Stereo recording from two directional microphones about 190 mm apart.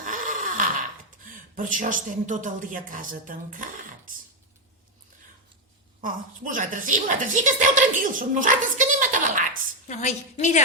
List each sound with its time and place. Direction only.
0.0 s a sound: 45° right (ahead or behind)
1.5 s a woman's voice: 45° right (ahead or behind)
6.0 s a woman's voice: 45° right (ahead or behind)
9.9 s a woman's voice: 35° left (ahead or behind)